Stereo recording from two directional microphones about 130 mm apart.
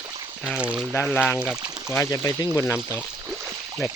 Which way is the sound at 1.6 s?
30° right (ahead or behind).